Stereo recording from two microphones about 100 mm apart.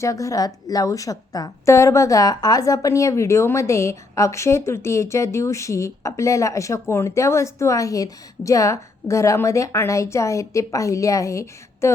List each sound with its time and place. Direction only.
0.0 s a woman's voice: 35° left (ahead or behind)